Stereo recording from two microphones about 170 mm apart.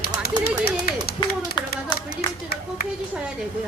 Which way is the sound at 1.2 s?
25° left (ahead or behind).